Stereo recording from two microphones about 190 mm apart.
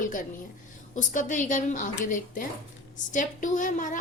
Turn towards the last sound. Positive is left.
turn(degrees=45)  # may be behind; listen again after turning